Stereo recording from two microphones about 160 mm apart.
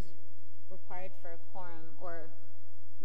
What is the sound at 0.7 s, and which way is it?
A woman's voice, 45° left (ahead or behind).